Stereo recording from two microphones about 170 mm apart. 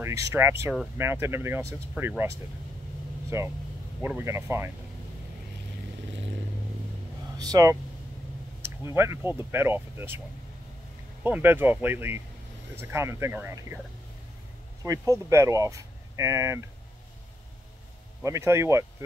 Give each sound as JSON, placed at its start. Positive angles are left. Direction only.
{"t": 0.0, "sound": "speech", "side_deg": -15}
{"t": 7.4, "sound": "speech", "side_deg": -20}
{"t": 8.8, "sound": "speech", "side_deg": -15}
{"t": 11.2, "sound": "speech", "side_deg": -10}
{"t": 14.8, "sound": "speech", "side_deg": -20}
{"t": 18.2, "sound": "speech", "side_deg": -15}